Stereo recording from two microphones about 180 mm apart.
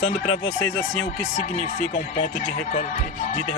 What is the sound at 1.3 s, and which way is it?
Speech, 40° left (ahead or behind).